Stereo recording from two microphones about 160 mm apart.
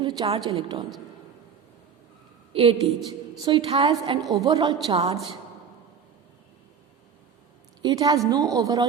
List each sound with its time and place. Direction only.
0.0 s a sound: 25° right (ahead or behind)
0.3 s a woman's voice: 35° right (ahead or behind)
2.5 s a woman's voice: 35° right (ahead or behind)
7.8 s a woman's voice: 25° right (ahead or behind)